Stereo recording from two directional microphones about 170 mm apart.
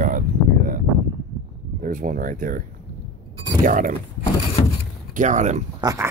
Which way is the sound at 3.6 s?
50° right (ahead or behind).